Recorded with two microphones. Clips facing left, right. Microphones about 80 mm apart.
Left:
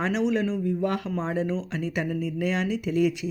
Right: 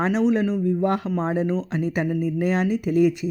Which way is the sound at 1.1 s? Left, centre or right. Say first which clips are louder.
Right 4 dB; centre.